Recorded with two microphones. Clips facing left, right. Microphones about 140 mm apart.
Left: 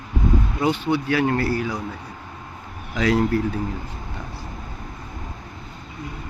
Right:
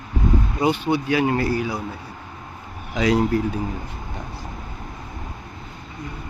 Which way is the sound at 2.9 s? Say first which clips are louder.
Right 1 dB; 15° right (ahead or behind).